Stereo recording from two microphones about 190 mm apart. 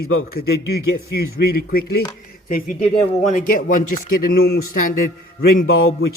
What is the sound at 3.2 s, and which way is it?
Speech, 40° left (ahead or behind).